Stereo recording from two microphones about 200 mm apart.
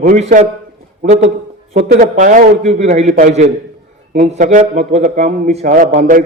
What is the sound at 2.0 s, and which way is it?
A man's voice, 40° right (ahead or behind).